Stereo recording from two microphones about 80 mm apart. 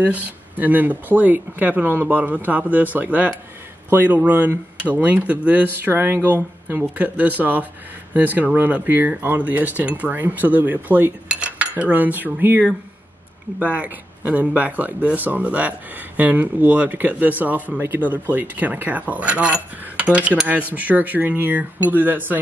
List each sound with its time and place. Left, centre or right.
0.0 s speech: right
11.2 s cutlery: centre
13.6 s speech: centre